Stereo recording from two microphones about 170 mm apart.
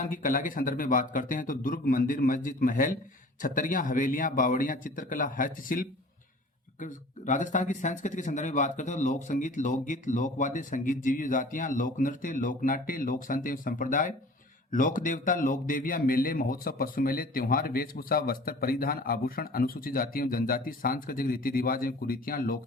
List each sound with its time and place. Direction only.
0.0 s a man's voice: 50° left (ahead or behind)